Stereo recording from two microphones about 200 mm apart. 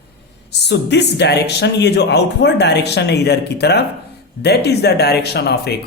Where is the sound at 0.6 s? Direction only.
60° left (ahead or behind).